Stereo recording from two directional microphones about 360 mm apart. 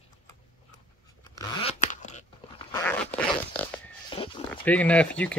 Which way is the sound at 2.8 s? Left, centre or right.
Centre.